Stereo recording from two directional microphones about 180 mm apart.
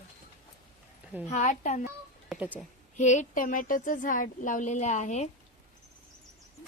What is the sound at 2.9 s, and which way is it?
Speech, 45° left (ahead or behind).